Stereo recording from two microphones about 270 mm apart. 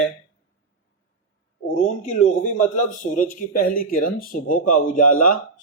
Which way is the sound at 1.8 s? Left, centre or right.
Left.